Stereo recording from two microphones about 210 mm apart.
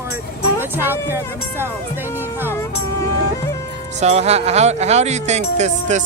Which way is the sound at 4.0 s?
30° right (ahead or behind).